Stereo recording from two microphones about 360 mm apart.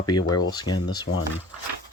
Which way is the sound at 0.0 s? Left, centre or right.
Centre.